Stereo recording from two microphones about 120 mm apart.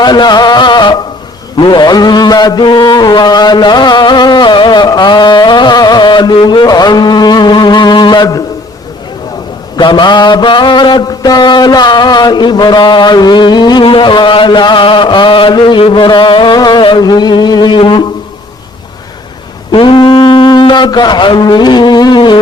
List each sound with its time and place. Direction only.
0.0 s music: 35° left (ahead or behind)
1.5 s mantra: 40° left (ahead or behind)
9.7 s mantra: 40° left (ahead or behind)
19.7 s a sound: 45° left (ahead or behind)